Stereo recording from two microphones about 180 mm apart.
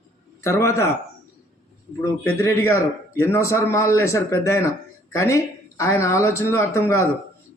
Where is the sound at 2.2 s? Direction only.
15° left (ahead or behind).